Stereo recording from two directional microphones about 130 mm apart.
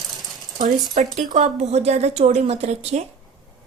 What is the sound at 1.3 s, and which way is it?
A woman's voice, 60° right (ahead or behind).